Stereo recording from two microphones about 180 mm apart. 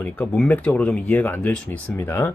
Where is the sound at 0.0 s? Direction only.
10° left (ahead or behind).